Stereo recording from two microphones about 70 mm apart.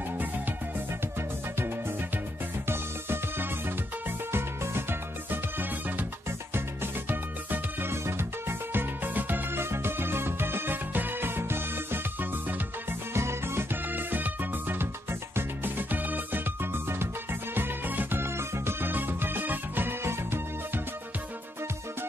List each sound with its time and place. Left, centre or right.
2.7 s music: right